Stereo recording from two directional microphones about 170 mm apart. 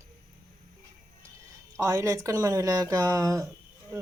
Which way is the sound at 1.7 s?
15° right (ahead or behind).